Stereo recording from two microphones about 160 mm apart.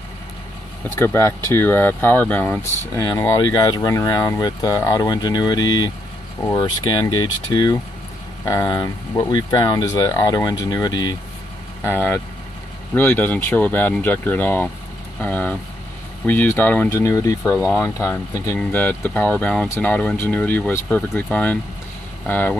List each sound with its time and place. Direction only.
0.9 s speech: 15° left (ahead or behind)
11.8 s speech: 15° left (ahead or behind)